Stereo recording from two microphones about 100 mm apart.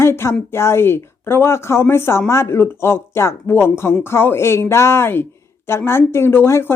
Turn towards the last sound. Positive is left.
turn(degrees=25)  # may be behind; listen again after turning